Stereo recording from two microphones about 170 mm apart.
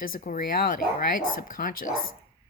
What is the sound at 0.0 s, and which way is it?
Speech, 55° left (ahead or behind).